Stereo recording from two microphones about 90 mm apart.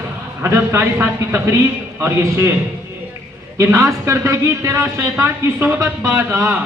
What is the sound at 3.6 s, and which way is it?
A woman's voice, 30° right (ahead or behind).